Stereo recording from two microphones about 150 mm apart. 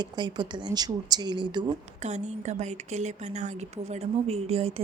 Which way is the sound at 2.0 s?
50° right (ahead or behind).